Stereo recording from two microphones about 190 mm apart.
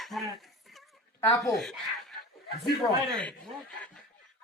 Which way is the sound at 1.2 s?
15° left (ahead or behind).